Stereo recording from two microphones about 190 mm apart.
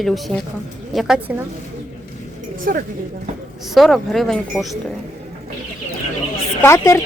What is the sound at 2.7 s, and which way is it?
Speech, 45° right (ahead or behind).